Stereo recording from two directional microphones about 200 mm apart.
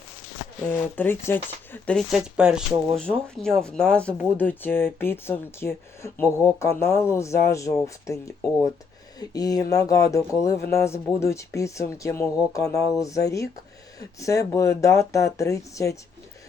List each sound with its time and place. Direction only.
0.6 s speech: 10° left (ahead or behind)